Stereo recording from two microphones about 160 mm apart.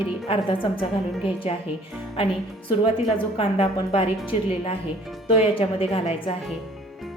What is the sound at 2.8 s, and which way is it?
A woman's voice, 35° left (ahead or behind).